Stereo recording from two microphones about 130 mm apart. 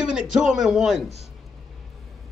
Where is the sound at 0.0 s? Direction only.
5° right (ahead or behind).